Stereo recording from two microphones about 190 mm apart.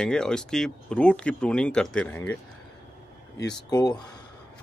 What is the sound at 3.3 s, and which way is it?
Speech, 20° left (ahead or behind).